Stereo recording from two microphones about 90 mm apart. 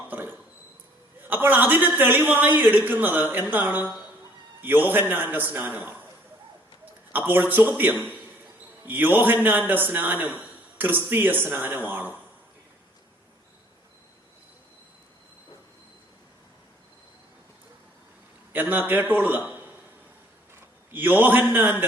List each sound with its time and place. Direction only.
0.1 s a sound: 20° right (ahead or behind)
1.2 s a man's voice: 20° right (ahead or behind)
7.1 s a man's voice: 20° right (ahead or behind)
18.5 s a man's voice: 20° right (ahead or behind)
19.5 s a sound: 20° right (ahead or behind)
20.9 s a man's voice: 20° right (ahead or behind)